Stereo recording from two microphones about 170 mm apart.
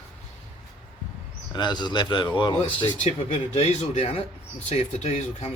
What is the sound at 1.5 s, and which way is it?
A man's voice, 25° left (ahead or behind).